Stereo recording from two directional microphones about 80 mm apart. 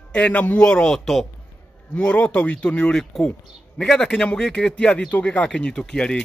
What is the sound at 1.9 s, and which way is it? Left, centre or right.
A man's voice, centre.